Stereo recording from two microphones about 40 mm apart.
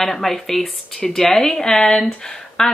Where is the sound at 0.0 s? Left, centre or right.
Centre.